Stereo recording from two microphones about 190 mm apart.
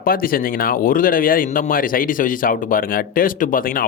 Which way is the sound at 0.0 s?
50° left (ahead or behind).